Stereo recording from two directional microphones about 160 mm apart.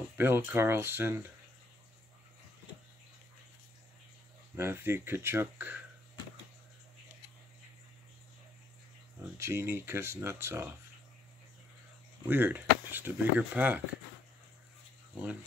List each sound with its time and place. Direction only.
0.2 s speech: 15° right (ahead or behind)
4.6 s speech: 15° right (ahead or behind)
9.4 s speech: 15° right (ahead or behind)
12.3 s speech: 10° right (ahead or behind)